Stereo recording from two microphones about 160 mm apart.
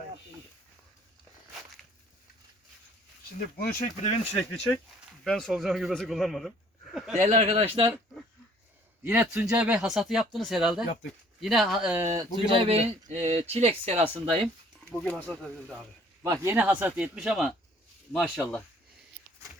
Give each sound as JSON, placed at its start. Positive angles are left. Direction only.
{"t": 3.7, "sound": "speech", "side_deg": 55}
{"t": 5.2, "sound": "speech", "side_deg": 5}
{"t": 7.2, "sound": "speech", "side_deg": -45}
{"t": 9.0, "sound": "speech", "side_deg": -15}
{"t": 12.5, "sound": "speech", "side_deg": -35}
{"t": 14.9, "sound": "speech", "side_deg": 5}
{"t": 16.2, "sound": "speech", "side_deg": -20}